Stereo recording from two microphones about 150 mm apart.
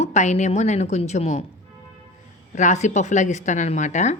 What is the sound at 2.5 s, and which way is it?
A woman's voice, 50° left (ahead or behind).